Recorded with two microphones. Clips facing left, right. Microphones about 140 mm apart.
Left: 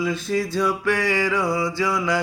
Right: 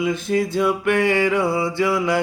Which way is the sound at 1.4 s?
25° right (ahead or behind).